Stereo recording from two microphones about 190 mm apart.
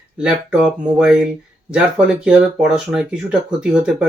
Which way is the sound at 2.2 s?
5° right (ahead or behind).